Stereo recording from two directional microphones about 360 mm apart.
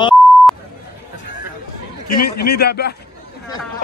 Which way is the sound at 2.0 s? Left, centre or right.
Left.